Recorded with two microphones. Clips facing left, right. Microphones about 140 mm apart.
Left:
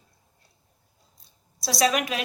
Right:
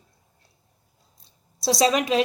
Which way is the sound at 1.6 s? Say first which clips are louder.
Right 3 dB; 30° right (ahead or behind).